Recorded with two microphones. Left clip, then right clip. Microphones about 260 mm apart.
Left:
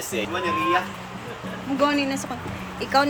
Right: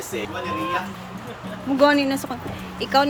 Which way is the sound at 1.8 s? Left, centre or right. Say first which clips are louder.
Right 5 dB; centre.